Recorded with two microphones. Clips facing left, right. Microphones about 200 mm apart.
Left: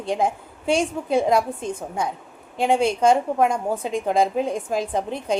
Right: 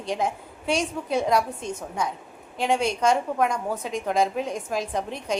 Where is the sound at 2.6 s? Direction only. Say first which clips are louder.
Left 4 dB; 30° left (ahead or behind).